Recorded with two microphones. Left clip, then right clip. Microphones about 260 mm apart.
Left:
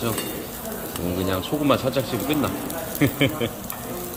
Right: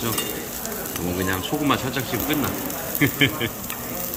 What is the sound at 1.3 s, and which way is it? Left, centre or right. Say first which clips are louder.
Speech: left 2 dB; centre.